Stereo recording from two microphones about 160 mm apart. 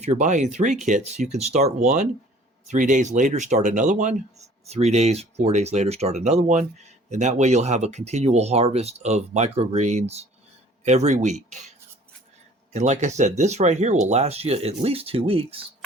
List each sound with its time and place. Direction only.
0.0 s speech: 45° right (ahead or behind)
12.7 s speech: 45° right (ahead or behind)